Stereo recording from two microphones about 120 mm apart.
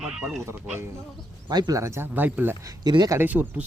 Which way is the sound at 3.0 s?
20° right (ahead or behind).